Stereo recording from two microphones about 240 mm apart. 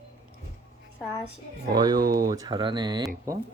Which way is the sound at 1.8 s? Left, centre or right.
Centre.